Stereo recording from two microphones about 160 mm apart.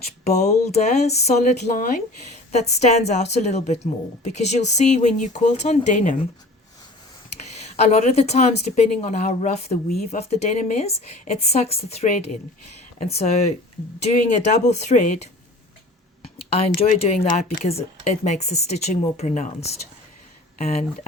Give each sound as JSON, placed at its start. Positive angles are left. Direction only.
{"t": 0.3, "sound": "speech", "side_deg": 45}
{"t": 7.3, "sound": "speech", "side_deg": 45}
{"t": 16.2, "sound": "a sound", "side_deg": 40}
{"t": 17.3, "sound": "speech", "side_deg": 40}